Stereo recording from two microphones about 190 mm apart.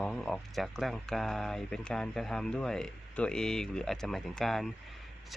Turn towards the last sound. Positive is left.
turn(degrees=0)  # may be behind; listen again after turning